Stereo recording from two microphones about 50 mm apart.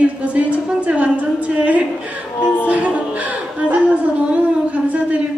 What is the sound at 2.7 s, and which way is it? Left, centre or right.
Music, right.